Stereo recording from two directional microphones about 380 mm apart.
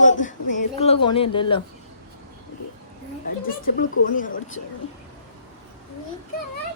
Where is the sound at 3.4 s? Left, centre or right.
Left.